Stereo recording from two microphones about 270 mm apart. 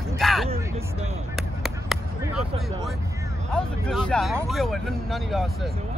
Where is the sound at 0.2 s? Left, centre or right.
Centre.